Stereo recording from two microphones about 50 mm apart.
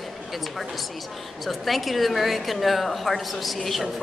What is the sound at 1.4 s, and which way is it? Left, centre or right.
A woman's voice, centre.